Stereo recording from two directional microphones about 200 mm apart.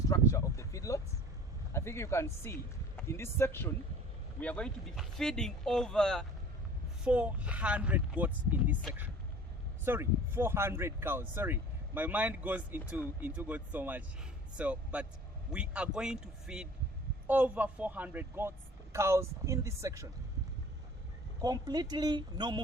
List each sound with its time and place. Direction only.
0.1 s a sound: 15° left (ahead or behind)
1.7 s speech: 15° left (ahead or behind); by 8.7 s 10° right (ahead or behind)
9.8 s speech: 10° right (ahead or behind)
21.4 s speech: 20° right (ahead or behind)